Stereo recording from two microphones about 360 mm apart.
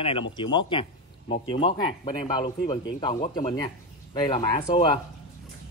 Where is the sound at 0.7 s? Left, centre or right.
Centre.